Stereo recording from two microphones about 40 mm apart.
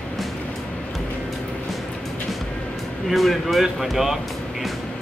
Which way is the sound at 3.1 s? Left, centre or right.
Centre.